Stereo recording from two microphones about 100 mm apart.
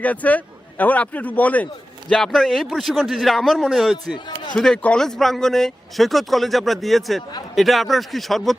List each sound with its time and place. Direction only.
0.0 s speech: 15° left (ahead or behind)
2.0 s speech: 5° left (ahead or behind)